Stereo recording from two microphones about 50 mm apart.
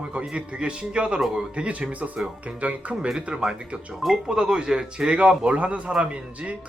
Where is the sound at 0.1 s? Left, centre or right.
Right.